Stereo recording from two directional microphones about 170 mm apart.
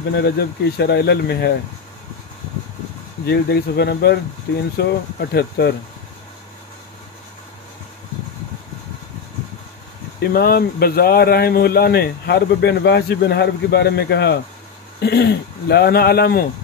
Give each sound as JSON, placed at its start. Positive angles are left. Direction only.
{"t": 0.1, "sound": "speech", "side_deg": 75}
{"t": 3.3, "sound": "speech", "side_deg": 75}
{"t": 10.2, "sound": "speech", "side_deg": 65}